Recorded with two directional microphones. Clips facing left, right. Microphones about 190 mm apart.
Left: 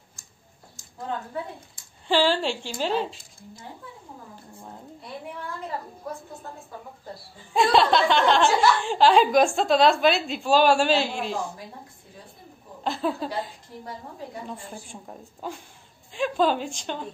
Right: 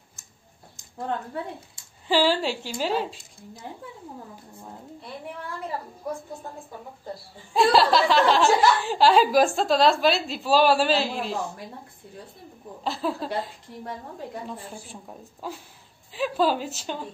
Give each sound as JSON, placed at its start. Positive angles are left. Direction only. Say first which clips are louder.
{"t": 2.0, "sound": "a woman's voice", "louder": "even", "side_deg": -10}
{"t": 7.5, "sound": "a woman's voice", "louder": "right 1 dB", "side_deg": 0}
{"t": 12.8, "sound": "a woman's voice", "louder": "left 1 dB", "side_deg": 0}
{"t": 14.5, "sound": "a woman's voice", "louder": "even", "side_deg": 0}